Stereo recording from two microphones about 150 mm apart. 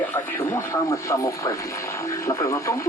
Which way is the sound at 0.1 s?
15° left (ahead or behind).